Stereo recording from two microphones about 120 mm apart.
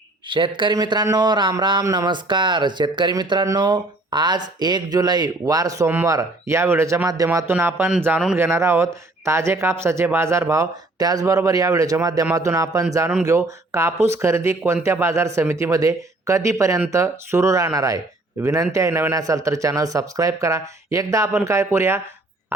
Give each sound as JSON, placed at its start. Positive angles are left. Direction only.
{"t": 0.3, "sound": "speech", "side_deg": -40}